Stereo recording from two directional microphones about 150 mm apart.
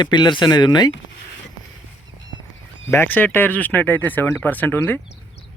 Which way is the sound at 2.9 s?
15° left (ahead or behind).